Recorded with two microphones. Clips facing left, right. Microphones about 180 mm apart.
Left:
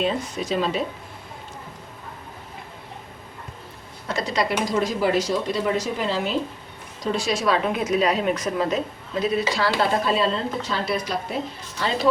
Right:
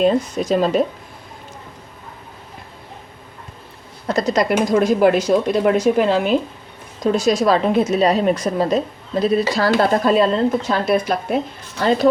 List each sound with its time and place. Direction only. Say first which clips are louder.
0.0 s speech: right 8 dB; 45° right (ahead or behind)
4.0 s speech: right 7 dB; 40° right (ahead or behind); by 6.3 s 60° right (ahead or behind)
7.0 s a woman's voice: right 7 dB; 45° right (ahead or behind)